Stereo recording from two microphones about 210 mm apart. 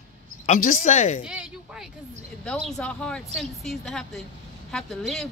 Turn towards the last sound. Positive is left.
turn(degrees=0)  # may be behind; listen again after turning